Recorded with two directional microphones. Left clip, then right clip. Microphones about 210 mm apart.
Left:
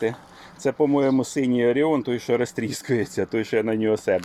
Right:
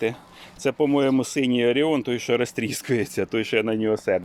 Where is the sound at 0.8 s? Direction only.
15° right (ahead or behind).